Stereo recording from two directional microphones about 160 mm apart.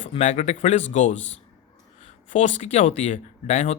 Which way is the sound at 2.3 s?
50° left (ahead or behind).